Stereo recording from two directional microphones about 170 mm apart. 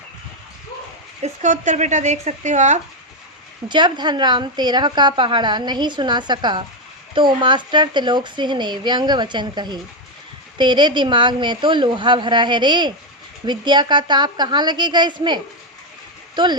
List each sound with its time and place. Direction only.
1.2 s speech: 45° right (ahead or behind)
3.7 s a woman's voice: 25° right (ahead or behind)